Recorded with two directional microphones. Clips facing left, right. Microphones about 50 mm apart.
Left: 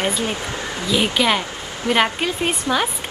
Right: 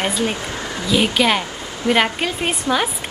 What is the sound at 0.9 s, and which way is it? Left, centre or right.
A woman's voice, centre.